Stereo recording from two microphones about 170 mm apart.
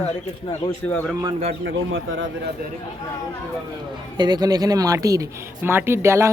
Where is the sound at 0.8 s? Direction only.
10° left (ahead or behind).